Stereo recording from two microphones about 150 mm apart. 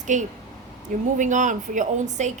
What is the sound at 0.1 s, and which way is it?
Speech, 55° right (ahead or behind).